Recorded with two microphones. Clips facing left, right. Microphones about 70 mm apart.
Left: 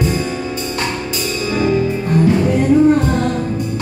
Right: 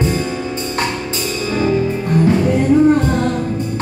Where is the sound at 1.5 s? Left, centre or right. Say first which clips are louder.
Even; centre.